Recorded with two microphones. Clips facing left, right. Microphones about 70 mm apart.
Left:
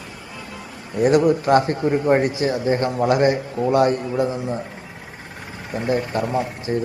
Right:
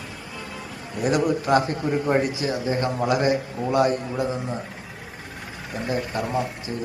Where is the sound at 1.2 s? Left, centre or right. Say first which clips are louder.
Left 4 dB; left.